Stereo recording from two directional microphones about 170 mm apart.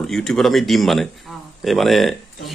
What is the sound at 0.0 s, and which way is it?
Speech, 5° left (ahead or behind).